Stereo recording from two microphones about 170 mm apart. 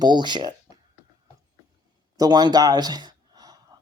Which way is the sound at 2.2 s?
25° right (ahead or behind).